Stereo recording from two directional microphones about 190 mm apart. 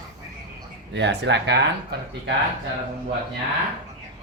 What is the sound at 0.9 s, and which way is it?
Speech, 65° right (ahead or behind).